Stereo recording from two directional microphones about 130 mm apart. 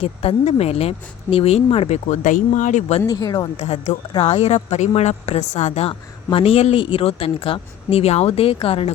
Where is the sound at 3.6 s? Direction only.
60° left (ahead or behind).